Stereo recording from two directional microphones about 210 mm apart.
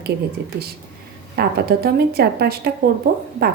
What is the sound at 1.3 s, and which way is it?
A woman's voice, 50° right (ahead or behind).